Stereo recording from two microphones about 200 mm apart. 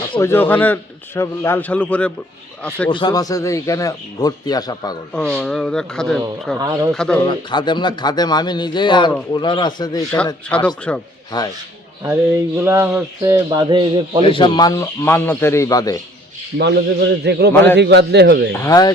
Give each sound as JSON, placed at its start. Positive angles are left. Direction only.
{"t": 0.1, "sound": "a man's voice", "side_deg": 15}
{"t": 2.9, "sound": "speech", "side_deg": 20}
{"t": 5.1, "sound": "speech", "side_deg": 5}
{"t": 6.6, "sound": "a man's voice", "side_deg": -15}
{"t": 6.9, "sound": "speech", "side_deg": 5}
{"t": 7.3, "sound": "speech", "side_deg": 25}
{"t": 10.9, "sound": "a man's voice", "side_deg": 10}
{"t": 11.3, "sound": "speech", "side_deg": 20}
{"t": 12.5, "sound": "a man's voice", "side_deg": -10}
{"t": 14.3, "sound": "a man's voice", "side_deg": 25}
{"t": 16.6, "sound": "a man's voice", "side_deg": -55}
{"t": 18.5, "sound": "a man's voice", "side_deg": 15}